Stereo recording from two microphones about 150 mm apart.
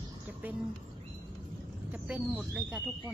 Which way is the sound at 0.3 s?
10° right (ahead or behind).